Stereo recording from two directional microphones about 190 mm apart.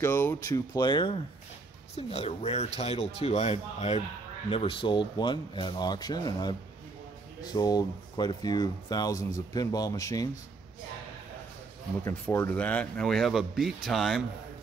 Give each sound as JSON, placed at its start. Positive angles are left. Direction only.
{"t": 0.0, "sound": "speech", "side_deg": 10}
{"t": 0.7, "sound": "speech", "side_deg": 25}
{"t": 12.0, "sound": "speech", "side_deg": 15}